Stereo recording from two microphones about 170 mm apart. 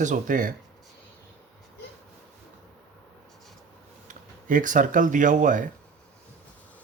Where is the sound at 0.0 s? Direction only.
50° right (ahead or behind).